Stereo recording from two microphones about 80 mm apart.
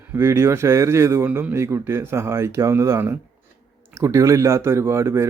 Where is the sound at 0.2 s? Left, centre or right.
Right.